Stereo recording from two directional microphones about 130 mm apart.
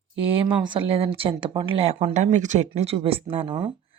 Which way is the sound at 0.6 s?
40° right (ahead or behind).